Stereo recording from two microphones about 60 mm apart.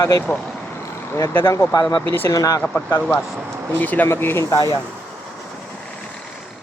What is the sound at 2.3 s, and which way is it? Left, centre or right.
Speech, left.